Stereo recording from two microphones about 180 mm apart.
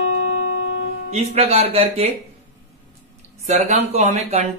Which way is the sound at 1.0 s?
35° right (ahead or behind).